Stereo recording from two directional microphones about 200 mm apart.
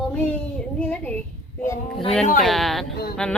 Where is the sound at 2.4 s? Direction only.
Centre (ahead or behind).